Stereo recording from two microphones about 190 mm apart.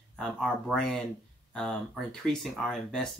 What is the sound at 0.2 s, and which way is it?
Speech, 5° left (ahead or behind).